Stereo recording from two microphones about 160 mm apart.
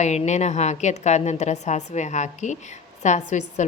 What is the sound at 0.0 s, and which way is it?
A woman's voice, 45° left (ahead or behind).